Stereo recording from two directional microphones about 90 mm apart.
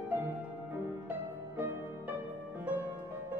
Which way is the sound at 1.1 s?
20° right (ahead or behind).